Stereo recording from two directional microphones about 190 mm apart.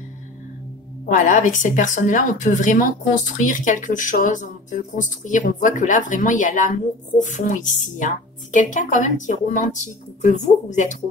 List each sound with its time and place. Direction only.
1.0 s a woman's voice: 45° left (ahead or behind)